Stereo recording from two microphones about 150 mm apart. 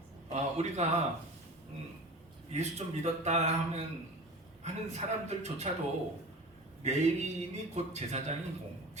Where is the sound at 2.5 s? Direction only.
50° right (ahead or behind).